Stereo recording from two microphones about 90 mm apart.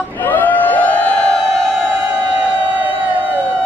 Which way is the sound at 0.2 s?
20° left (ahead or behind).